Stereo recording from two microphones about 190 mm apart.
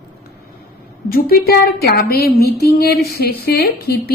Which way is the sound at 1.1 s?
50° left (ahead or behind).